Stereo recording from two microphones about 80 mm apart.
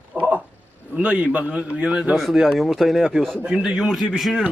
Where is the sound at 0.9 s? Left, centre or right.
Centre.